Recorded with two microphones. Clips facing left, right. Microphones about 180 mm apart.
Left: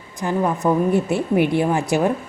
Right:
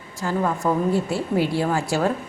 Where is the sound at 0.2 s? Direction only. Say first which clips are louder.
Left 3 dB; 20° left (ahead or behind).